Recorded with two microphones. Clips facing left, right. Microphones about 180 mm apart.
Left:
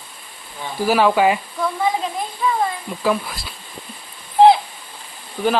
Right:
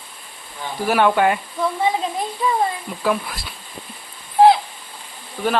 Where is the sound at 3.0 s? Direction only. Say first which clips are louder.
Left 1 dB; centre (ahead or behind).